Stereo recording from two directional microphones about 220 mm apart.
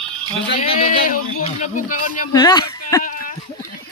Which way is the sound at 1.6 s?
35° left (ahead or behind).